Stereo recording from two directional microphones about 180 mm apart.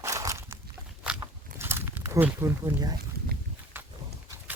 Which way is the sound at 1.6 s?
15° right (ahead or behind).